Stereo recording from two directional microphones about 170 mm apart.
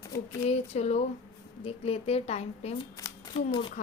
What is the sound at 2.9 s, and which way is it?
Speech, 25° left (ahead or behind).